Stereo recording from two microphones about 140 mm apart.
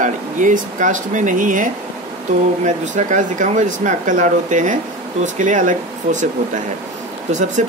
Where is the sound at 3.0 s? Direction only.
65° right (ahead or behind).